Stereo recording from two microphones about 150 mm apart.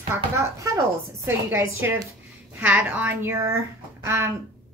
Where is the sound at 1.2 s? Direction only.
15° right (ahead or behind).